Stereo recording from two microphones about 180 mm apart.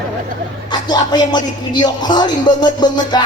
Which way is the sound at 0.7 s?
25° left (ahead or behind).